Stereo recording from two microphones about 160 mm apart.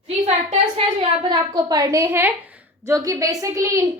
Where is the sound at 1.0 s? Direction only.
25° right (ahead or behind).